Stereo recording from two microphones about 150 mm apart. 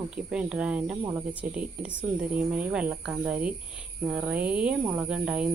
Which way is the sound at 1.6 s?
10° right (ahead or behind).